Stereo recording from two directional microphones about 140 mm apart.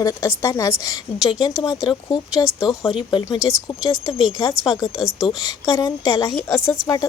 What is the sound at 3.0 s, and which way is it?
Speech, 35° left (ahead or behind).